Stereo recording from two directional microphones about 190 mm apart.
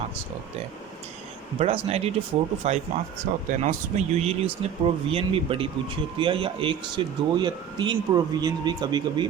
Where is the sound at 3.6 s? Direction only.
35° right (ahead or behind).